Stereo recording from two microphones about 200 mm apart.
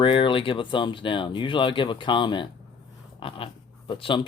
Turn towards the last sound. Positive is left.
turn(degrees=25)  # may be behind; listen again after turning